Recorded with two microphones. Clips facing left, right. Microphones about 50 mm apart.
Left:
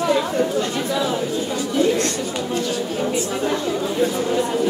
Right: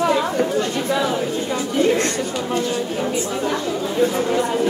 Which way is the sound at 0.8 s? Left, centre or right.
Right.